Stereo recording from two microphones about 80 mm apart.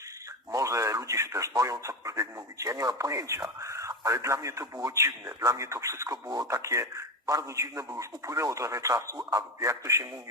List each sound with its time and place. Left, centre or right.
0.5 s speech: right